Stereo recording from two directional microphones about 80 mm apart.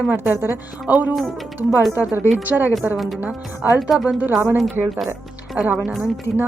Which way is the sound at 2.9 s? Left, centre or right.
Centre.